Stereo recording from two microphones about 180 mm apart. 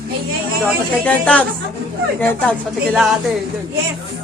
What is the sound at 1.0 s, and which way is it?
Speech, 5° left (ahead or behind).